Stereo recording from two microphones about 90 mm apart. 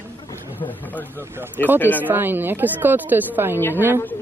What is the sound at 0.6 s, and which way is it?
Speech, 20° left (ahead or behind).